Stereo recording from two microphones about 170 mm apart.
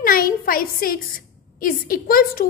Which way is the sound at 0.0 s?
55° left (ahead or behind).